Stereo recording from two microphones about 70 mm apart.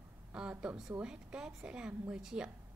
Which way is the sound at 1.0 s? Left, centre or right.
Centre.